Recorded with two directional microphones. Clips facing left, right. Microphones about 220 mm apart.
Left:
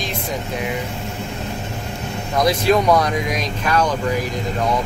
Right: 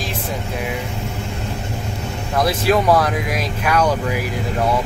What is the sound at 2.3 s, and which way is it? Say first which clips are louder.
Speech: left 1 dB; 5° right (ahead or behind).